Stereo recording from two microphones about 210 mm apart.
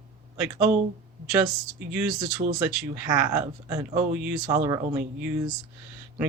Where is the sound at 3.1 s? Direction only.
15° right (ahead or behind).